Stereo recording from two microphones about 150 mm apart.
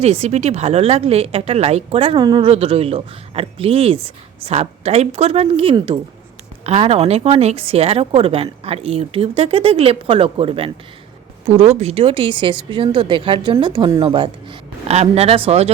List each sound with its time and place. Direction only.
0.0 s a woman's voice: 45° right (ahead or behind)
2.5 s speech: 40° right (ahead or behind)
14.8 s a woman's voice: 45° right (ahead or behind)